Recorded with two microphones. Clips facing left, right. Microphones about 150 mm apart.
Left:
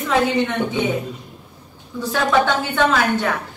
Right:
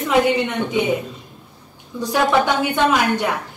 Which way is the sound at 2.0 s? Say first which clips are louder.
Right 1 dB; 15° right (ahead or behind).